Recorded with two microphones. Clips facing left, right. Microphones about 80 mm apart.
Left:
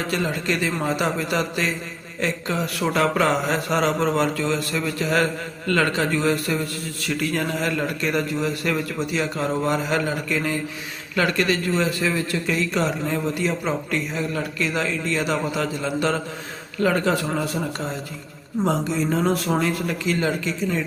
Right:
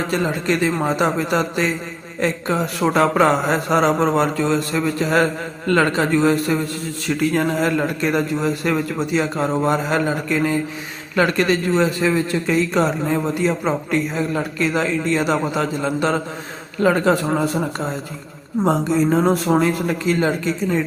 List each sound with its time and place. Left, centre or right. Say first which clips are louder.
0.4 s a man's voice: right 4 dB; right